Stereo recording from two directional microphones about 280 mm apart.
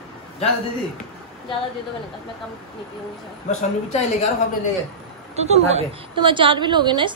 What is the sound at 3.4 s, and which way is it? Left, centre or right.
Speech, left.